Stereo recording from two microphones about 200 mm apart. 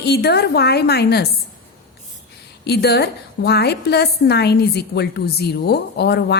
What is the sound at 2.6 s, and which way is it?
A woman's voice, 55° left (ahead or behind).